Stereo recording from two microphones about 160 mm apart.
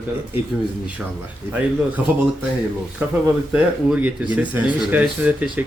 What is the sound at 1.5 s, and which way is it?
Speech, 10° right (ahead or behind).